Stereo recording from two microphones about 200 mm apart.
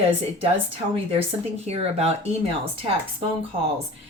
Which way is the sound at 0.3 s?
30° right (ahead or behind).